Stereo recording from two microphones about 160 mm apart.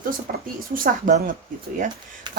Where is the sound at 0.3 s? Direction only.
65° right (ahead or behind).